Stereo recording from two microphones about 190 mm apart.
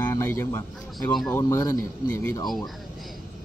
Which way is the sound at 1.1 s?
Centre (ahead or behind).